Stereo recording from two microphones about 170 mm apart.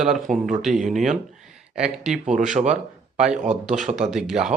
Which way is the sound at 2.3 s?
45° right (ahead or behind).